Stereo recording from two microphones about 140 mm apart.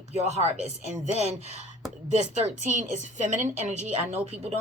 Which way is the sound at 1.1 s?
50° right (ahead or behind).